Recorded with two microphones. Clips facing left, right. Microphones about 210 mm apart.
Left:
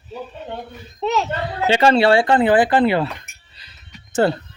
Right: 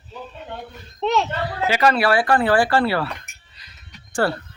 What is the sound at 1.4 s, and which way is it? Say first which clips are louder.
Speech: left 6 dB; 25° left (ahead or behind).